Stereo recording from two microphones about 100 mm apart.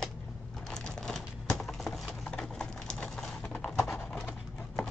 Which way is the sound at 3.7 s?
20° left (ahead or behind).